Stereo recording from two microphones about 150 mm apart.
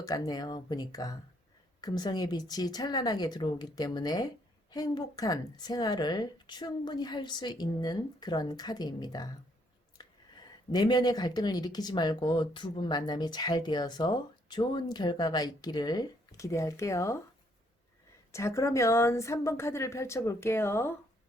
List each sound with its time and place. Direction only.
0.0 s speech: 25° left (ahead or behind)
18.3 s speech: 20° left (ahead or behind)